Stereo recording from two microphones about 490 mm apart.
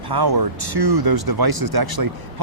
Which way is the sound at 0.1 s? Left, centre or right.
Right.